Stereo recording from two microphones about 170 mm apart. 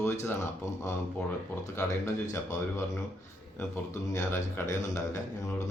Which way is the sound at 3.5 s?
15° left (ahead or behind).